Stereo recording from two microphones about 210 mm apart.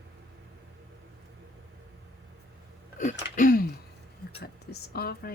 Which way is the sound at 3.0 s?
40° left (ahead or behind).